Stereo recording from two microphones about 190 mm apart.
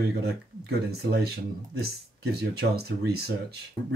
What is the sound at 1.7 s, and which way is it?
Speech, 55° right (ahead or behind).